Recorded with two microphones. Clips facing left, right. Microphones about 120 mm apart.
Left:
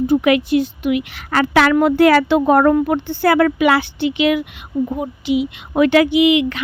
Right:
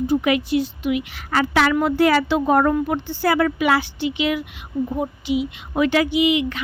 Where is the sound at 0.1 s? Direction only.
65° left (ahead or behind).